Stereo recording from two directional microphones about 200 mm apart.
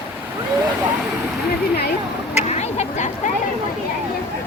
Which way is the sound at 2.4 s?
35° left (ahead or behind).